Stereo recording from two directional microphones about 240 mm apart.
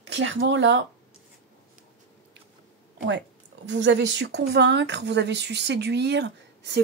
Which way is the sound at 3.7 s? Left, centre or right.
Right.